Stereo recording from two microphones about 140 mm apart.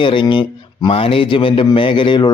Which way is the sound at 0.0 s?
35° left (ahead or behind).